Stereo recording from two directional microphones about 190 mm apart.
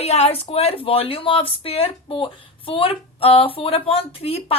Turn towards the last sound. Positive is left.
turn(degrees=30)  # may be behind; listen again after turning